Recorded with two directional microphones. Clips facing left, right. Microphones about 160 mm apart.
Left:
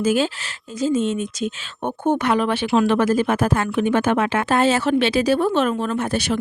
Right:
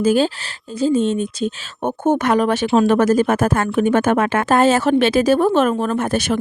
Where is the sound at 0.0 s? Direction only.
35° right (ahead or behind).